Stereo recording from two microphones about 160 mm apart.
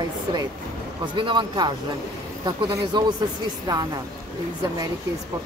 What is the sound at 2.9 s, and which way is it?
Speech, 25° right (ahead or behind).